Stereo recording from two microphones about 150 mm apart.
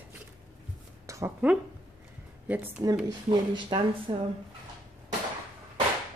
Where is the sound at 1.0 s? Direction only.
20° right (ahead or behind).